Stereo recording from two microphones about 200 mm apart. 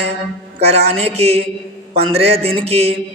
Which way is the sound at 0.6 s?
30° right (ahead or behind).